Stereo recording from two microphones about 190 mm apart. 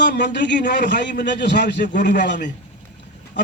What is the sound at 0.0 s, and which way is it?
A man's voice, 65° left (ahead or behind).